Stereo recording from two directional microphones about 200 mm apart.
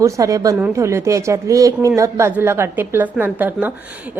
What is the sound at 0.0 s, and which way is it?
A woman's voice, 15° right (ahead or behind).